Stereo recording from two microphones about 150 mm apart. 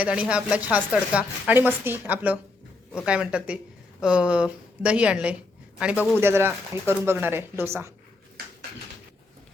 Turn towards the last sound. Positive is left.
turn(degrees=-15)  # may be behind; listen again after turning